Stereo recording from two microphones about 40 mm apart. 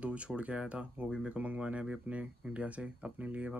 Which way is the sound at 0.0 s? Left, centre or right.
Right.